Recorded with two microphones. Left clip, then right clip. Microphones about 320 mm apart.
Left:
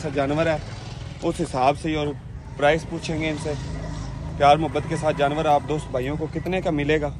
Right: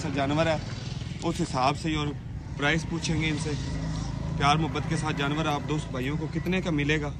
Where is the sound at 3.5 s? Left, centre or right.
Left.